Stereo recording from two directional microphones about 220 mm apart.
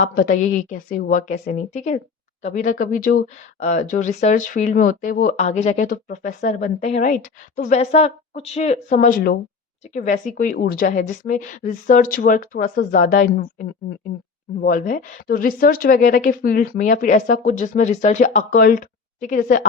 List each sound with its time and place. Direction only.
0.0 s speech: 40° left (ahead or behind)